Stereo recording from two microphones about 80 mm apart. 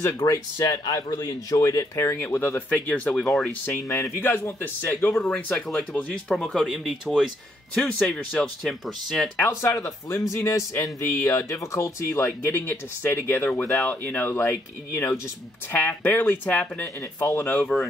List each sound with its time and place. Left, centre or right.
0.0 s speech: left; by 3.3 s centre
3.3 s speech: centre
3.8 s speech: left
4.2 s speech: left
5.3 s a man's voice: centre
7.7 s a man's voice: centre
8.6 s speech: centre
9.4 s speech: left
15.7 s speech: centre